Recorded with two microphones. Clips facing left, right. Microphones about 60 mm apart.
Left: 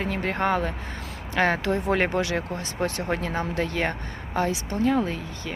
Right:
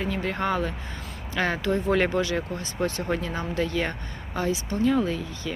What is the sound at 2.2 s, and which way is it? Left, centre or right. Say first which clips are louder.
Speech: even; left.